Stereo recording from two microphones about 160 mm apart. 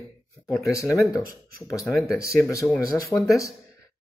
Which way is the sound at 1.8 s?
Centre (ahead or behind).